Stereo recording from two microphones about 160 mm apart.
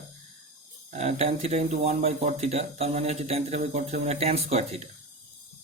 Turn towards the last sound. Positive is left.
turn(degrees=-40)  # may be behind; listen again after turning